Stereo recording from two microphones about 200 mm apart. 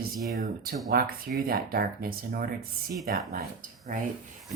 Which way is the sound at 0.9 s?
50° right (ahead or behind).